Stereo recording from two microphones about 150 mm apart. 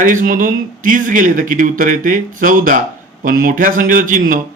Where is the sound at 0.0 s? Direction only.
65° right (ahead or behind).